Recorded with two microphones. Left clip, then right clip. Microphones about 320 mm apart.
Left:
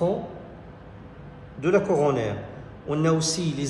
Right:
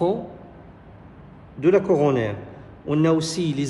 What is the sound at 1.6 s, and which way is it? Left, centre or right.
A man's voice, right.